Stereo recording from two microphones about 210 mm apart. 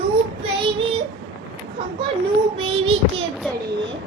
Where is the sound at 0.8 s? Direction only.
25° right (ahead or behind).